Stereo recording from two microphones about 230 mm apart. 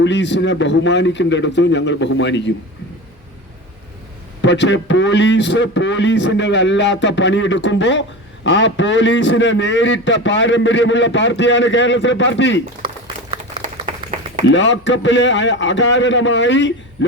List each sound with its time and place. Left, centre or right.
0.0 s a man's voice: left
4.4 s a man's voice: left
14.4 s a man's voice: left